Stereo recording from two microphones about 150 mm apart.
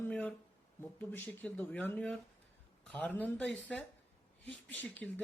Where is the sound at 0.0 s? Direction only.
10° left (ahead or behind).